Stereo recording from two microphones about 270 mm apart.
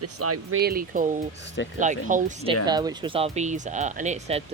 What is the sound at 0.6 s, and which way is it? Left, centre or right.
Speech, right.